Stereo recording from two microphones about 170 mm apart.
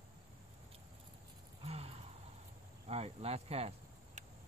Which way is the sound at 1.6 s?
35° right (ahead or behind).